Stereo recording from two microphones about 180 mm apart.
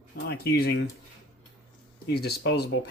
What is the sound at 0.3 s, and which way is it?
Speech, 60° left (ahead or behind).